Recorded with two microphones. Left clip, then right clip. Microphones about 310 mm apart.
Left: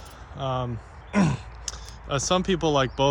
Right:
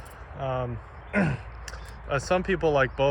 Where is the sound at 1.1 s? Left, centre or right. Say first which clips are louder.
Left 1 dB; left.